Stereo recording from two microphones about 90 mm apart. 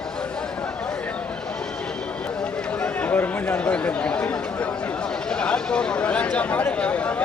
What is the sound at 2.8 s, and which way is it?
Chatter, 20° left (ahead or behind).